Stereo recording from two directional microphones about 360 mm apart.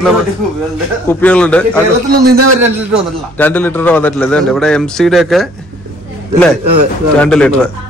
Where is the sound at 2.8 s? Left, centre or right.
Centre.